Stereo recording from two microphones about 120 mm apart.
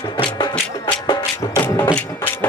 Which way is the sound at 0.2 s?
35° left (ahead or behind).